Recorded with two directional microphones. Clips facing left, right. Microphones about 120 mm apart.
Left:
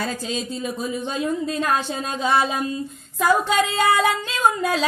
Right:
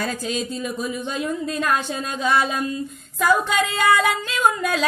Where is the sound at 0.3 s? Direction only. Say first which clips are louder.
Right 1 dB; 30° left (ahead or behind).